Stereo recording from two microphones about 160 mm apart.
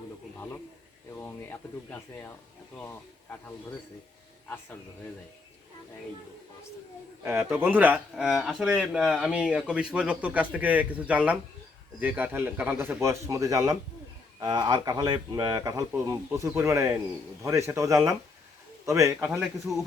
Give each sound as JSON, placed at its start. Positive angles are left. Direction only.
{"t": 0.3, "sound": "a sound", "side_deg": 15}
{"t": 1.1, "sound": "speech", "side_deg": 15}
{"t": 4.4, "sound": "speech", "side_deg": 10}
{"t": 7.2, "sound": "speech", "side_deg": -15}